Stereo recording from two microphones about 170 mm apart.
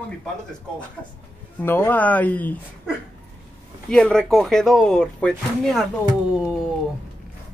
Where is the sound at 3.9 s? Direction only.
5° left (ahead or behind).